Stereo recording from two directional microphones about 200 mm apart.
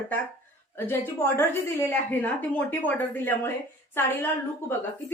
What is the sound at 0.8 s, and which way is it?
A woman's voice, 10° left (ahead or behind).